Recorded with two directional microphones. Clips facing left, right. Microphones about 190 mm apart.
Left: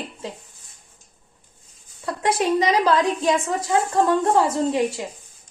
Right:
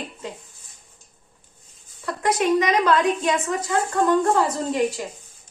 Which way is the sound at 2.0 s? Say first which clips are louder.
Even; 30° left (ahead or behind).